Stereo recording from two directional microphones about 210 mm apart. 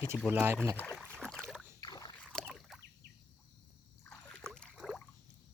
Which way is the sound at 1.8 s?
20° left (ahead or behind).